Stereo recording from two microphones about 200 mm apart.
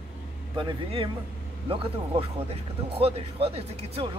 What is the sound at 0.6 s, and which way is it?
Speech, 25° right (ahead or behind).